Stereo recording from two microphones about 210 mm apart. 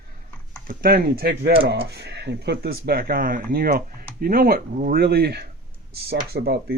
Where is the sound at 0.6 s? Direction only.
45° right (ahead or behind).